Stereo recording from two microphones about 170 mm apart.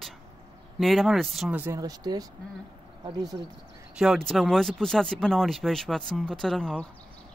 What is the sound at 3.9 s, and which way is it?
Speech, centre (ahead or behind).